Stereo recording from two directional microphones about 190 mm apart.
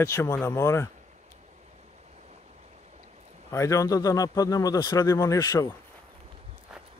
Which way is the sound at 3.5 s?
15° left (ahead or behind).